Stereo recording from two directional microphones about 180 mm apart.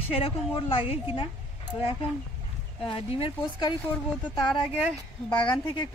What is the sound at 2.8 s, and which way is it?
Speech, 30° left (ahead or behind).